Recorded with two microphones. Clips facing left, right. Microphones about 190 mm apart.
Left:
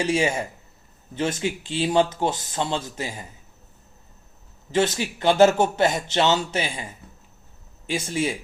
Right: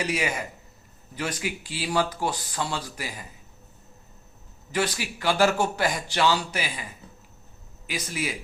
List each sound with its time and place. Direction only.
0.0 s a man's voice: 25° left (ahead or behind)
4.7 s a man's voice: 25° left (ahead or behind)